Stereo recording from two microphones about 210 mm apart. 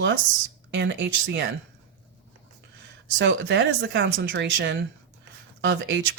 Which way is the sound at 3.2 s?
60° right (ahead or behind).